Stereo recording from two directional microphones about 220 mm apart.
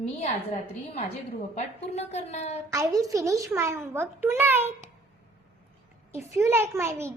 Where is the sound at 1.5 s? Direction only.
30° left (ahead or behind).